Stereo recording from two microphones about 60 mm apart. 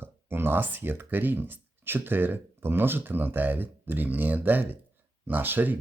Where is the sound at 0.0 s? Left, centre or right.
Right.